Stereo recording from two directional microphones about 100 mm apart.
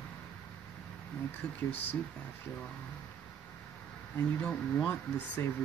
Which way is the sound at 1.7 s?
20° left (ahead or behind).